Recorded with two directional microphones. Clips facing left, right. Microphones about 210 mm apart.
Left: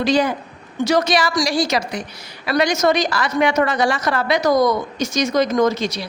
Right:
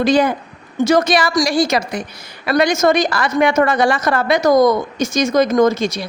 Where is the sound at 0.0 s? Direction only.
55° right (ahead or behind).